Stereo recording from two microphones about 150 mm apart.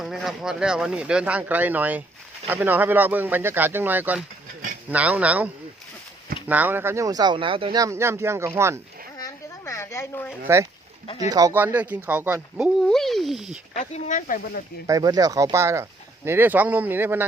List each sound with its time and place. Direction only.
0.0 s speech: centre (ahead or behind)
6.5 s speech: 10° right (ahead or behind); by 7.8 s 35° right (ahead or behind)
7.8 s speech: 20° right (ahead or behind)
9.1 s a sound: 20° left (ahead or behind)
10.4 s speech: 15° right (ahead or behind)
12.8 s speech: centre (ahead or behind)
13.7 s speech: 55° left (ahead or behind)
14.8 s speech: 25° right (ahead or behind)